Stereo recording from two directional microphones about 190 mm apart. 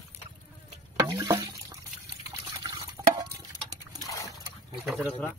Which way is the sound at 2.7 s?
20° right (ahead or behind).